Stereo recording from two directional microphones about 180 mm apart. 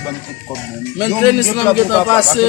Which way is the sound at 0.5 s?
15° left (ahead or behind).